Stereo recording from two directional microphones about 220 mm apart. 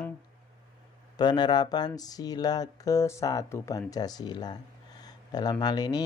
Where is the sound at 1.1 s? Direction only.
20° left (ahead or behind).